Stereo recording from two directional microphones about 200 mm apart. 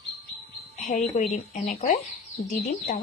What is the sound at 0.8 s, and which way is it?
A woman's voice, 40° left (ahead or behind).